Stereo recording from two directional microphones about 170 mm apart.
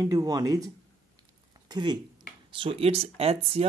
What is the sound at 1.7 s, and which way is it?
Speech, 25° right (ahead or behind).